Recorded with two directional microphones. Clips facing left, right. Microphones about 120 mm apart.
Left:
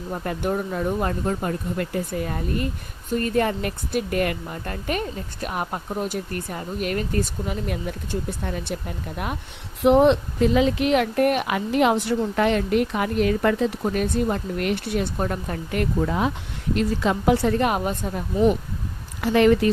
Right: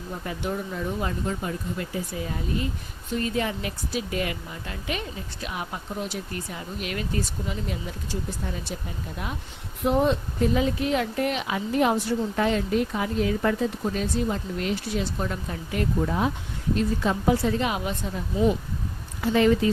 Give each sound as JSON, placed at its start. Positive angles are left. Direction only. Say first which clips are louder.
{"t": 0.1, "sound": "speech", "louder": "left 5 dB", "side_deg": 50}